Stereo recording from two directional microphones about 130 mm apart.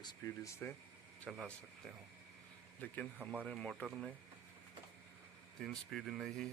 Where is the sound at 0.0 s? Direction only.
30° left (ahead or behind).